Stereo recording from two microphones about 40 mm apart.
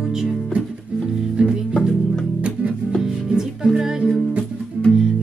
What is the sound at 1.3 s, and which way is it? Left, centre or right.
Music, right.